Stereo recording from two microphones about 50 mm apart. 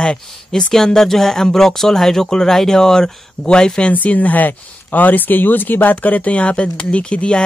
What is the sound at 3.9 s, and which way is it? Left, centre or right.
Speech, left.